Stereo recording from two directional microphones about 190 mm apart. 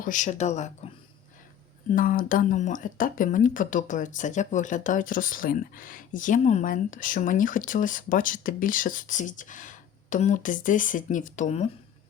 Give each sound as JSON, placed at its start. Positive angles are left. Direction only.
{"t": 0.0, "sound": "speech", "side_deg": 40}
{"t": 1.9, "sound": "speech", "side_deg": 45}